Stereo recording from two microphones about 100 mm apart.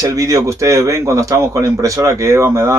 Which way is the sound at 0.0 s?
35° right (ahead or behind).